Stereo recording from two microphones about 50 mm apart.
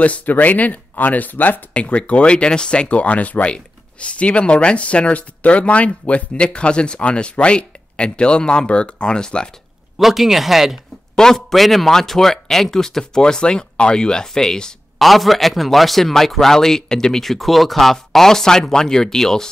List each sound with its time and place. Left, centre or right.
0.0 s speech: left
1.7 s speech: left
9.9 s speech: centre
11.1 s a man's voice: centre
15.0 s a man's voice: centre